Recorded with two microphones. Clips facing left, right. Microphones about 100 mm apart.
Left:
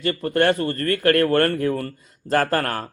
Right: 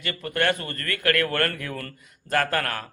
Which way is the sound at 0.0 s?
35° left (ahead or behind).